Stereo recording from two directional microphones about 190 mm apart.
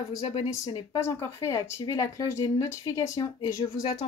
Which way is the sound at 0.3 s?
30° left (ahead or behind).